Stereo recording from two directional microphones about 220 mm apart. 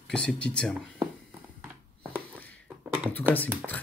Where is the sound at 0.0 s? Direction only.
5° left (ahead or behind).